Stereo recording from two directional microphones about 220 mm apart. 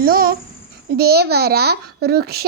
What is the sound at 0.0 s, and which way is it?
A child's voice, 40° right (ahead or behind).